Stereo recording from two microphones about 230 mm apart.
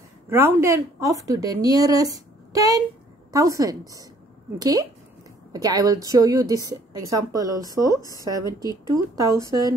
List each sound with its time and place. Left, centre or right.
0.3 s a woman's voice: centre
7.9 s a woman's voice: centre
8.2 s a woman's voice: centre